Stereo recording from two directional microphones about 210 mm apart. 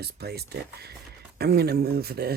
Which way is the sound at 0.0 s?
50° right (ahead or behind).